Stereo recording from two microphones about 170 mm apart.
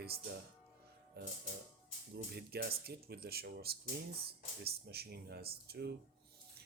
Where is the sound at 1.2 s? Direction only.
65° right (ahead or behind).